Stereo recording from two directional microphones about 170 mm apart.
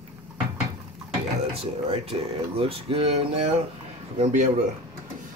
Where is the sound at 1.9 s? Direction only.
35° right (ahead or behind).